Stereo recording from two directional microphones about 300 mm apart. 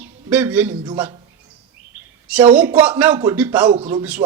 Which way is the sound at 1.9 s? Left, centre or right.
Centre.